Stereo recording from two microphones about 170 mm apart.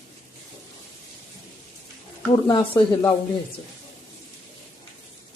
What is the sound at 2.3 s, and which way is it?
Speech, 30° left (ahead or behind).